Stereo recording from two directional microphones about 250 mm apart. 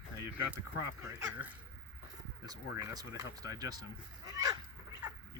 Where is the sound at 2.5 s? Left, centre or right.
Centre.